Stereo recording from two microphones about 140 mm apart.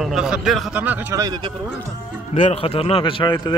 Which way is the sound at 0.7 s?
10° right (ahead or behind).